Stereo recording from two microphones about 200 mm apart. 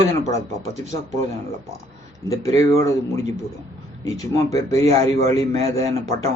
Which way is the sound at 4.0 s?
15° left (ahead or behind).